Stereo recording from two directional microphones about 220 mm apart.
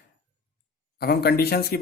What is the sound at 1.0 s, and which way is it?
Speech, 45° left (ahead or behind).